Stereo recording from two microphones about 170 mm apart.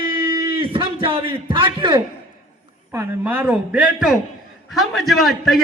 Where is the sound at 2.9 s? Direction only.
10° right (ahead or behind).